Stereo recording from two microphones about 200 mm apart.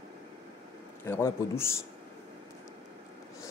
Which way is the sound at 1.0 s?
10° left (ahead or behind).